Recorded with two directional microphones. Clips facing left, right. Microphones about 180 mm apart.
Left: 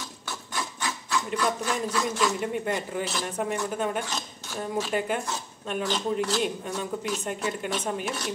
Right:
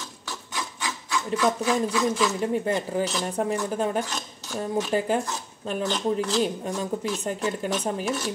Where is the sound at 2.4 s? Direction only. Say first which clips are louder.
Right 4 dB; 30° right (ahead or behind).